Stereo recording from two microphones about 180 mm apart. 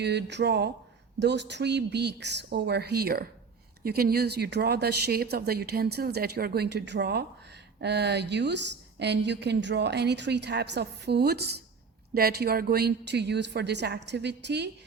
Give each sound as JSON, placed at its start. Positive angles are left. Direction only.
{"t": 0.0, "sound": "a woman's voice", "side_deg": -70}